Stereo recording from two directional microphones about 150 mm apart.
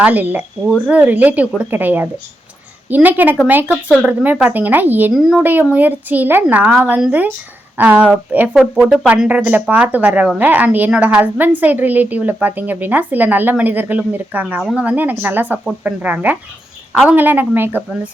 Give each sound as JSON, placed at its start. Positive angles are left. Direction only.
{"t": 0.0, "sound": "speech", "side_deg": -10}